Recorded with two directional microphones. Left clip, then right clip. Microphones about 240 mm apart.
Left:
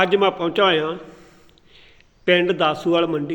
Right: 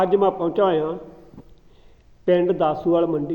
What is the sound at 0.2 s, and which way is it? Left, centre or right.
Speech, left.